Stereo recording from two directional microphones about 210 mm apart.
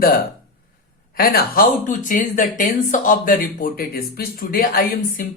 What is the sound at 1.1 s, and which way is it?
Speech, 45° left (ahead or behind).